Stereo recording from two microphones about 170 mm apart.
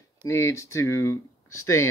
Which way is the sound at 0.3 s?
15° left (ahead or behind).